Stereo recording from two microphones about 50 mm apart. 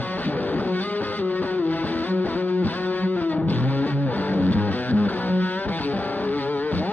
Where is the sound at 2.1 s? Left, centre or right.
Left.